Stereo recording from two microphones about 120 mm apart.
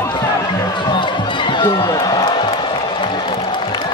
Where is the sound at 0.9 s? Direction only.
40° left (ahead or behind).